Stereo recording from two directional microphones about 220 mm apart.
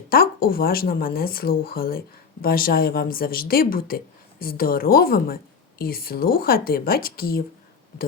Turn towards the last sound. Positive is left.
turn(degrees=45)  # may be behind; listen again after turning